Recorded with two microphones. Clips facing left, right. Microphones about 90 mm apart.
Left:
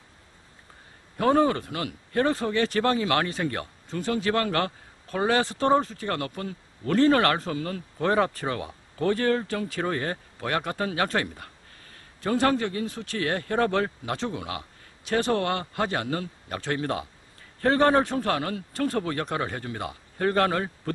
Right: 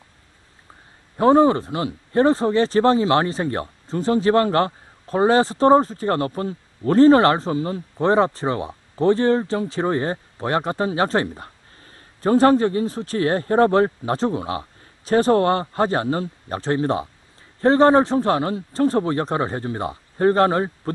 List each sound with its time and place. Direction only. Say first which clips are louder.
1.1 s speech: right 7 dB; 30° right (ahead or behind)